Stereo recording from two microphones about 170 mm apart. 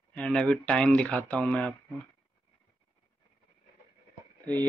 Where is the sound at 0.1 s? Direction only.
5° left (ahead or behind).